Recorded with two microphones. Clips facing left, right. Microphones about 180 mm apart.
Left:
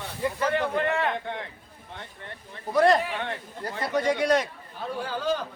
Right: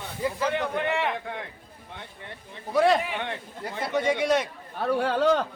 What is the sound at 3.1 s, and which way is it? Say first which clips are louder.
Speech: even; 15° right (ahead or behind).